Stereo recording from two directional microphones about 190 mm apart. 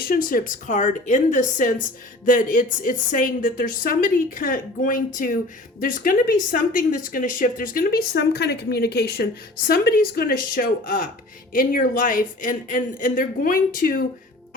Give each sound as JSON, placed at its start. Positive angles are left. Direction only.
{"t": 0.0, "sound": "speech", "side_deg": 50}